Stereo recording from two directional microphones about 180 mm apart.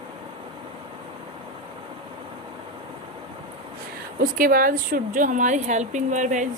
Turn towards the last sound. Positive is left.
turn(degrees=-45)  # may be behind; listen again after turning